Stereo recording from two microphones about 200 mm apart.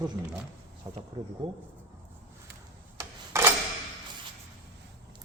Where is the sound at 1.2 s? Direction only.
15° right (ahead or behind).